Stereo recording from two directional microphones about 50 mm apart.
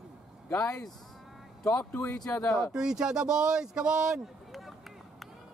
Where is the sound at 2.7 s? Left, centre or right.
Centre.